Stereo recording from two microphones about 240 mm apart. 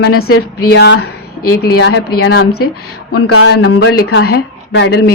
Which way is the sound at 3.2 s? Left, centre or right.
Left.